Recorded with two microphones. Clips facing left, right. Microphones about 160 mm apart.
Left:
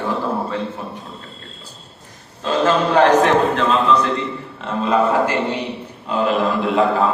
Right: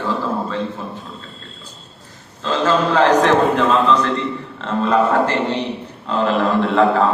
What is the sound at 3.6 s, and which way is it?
A man's voice, centre (ahead or behind).